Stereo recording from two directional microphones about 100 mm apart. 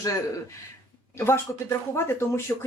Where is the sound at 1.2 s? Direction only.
25° left (ahead or behind).